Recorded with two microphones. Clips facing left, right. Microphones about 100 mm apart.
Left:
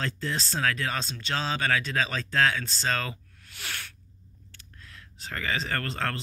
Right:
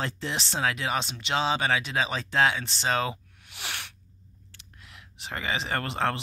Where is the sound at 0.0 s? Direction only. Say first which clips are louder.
Even; 25° right (ahead or behind).